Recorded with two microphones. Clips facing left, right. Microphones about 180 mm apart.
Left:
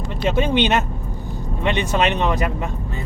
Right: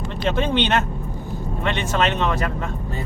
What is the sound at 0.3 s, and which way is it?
Speech, 10° left (ahead or behind).